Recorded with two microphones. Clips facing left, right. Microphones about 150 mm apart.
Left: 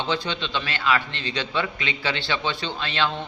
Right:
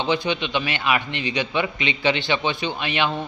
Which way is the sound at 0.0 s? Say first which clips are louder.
Right 4 dB; 15° right (ahead or behind).